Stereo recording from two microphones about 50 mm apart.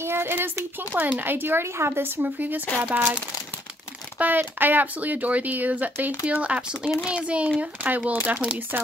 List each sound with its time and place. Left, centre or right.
0.0 s a sound: right
0.7 s speech: right
2.2 s speech: right
4.2 s a child's voice: right
8.7 s speech: right